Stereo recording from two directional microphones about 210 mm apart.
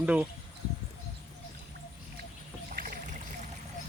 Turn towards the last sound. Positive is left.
turn(degrees=-45)  # may be behind; listen again after turning